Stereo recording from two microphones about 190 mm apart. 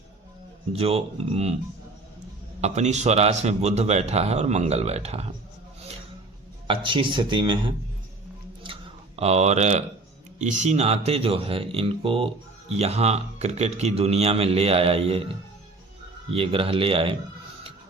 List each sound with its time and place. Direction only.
0.7 s speech: 30° right (ahead or behind)
2.6 s speech: 35° right (ahead or behind)
6.7 s speech: 25° right (ahead or behind)
8.6 s a sound: 30° right (ahead or behind)
10.3 s speech: 40° right (ahead or behind)
16.3 s speech: 30° right (ahead or behind)